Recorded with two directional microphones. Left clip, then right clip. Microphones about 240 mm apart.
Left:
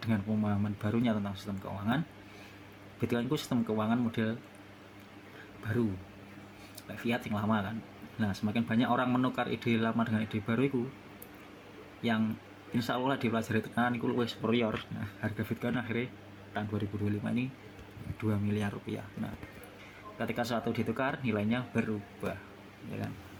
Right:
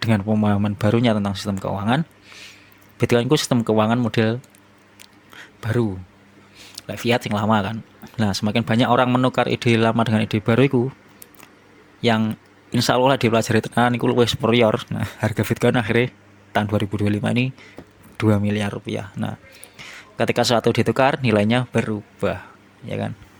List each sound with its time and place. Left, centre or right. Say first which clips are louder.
0.0 s speech: right 13 dB; right
3.0 s speech: right 15 dB; right
5.6 s speech: right 11 dB; right
7.0 s speech: right 14 dB; right
12.0 s speech: right 13 dB; right